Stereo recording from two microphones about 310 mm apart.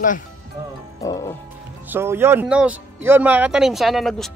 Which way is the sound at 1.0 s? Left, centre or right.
Centre.